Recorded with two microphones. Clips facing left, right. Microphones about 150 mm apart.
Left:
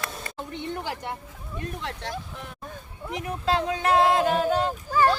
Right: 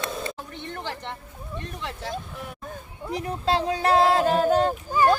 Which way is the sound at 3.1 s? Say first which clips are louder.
Right 1 dB; 35° right (ahead or behind).